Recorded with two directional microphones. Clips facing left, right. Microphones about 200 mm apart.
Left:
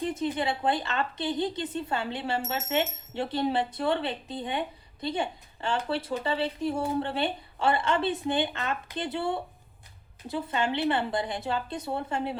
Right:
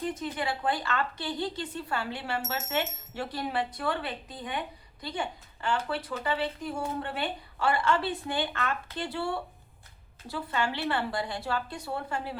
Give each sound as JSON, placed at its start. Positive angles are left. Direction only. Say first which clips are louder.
{"t": 0.1, "sound": "a woman's voice", "louder": "left 4 dB", "side_deg": 25}